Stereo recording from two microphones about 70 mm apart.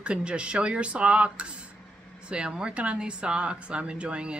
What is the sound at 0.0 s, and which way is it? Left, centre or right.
A woman's voice, centre.